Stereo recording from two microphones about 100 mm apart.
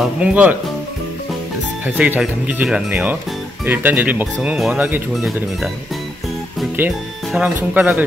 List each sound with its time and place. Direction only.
0.2 s speech: 15° right (ahead or behind)
1.9 s speech: 10° right (ahead or behind)
5.1 s speech: centre (ahead or behind)
6.8 s speech: 20° right (ahead or behind)